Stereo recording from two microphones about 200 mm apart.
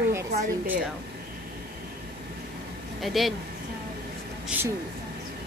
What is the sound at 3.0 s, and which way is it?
Speech, centre (ahead or behind).